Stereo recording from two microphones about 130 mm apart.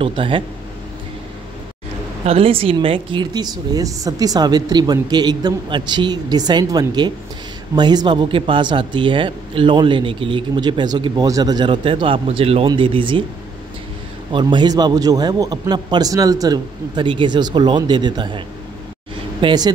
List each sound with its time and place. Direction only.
0.0 s speech: 40° right (ahead or behind)
2.2 s speech: 50° right (ahead or behind)
14.3 s speech: 35° right (ahead or behind)
19.4 s speech: 30° right (ahead or behind)